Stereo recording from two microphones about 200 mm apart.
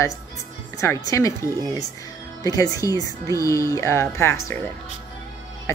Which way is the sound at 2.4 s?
15° left (ahead or behind).